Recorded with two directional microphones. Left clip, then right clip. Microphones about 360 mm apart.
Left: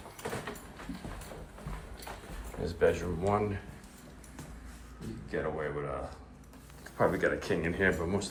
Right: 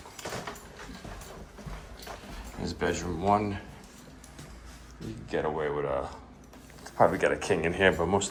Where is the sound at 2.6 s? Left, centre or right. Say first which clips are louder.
Left 2 dB; centre.